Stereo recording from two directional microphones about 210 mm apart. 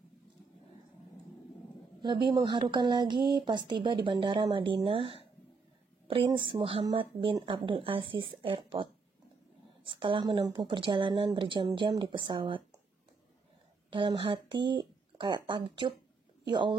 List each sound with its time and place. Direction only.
2.2 s speech: 20° right (ahead or behind)
9.8 s speech: 25° right (ahead or behind)
13.8 s a woman's voice: 25° right (ahead or behind)